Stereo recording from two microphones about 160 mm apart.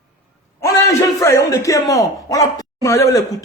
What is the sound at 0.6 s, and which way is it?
A man's voice, 20° left (ahead or behind).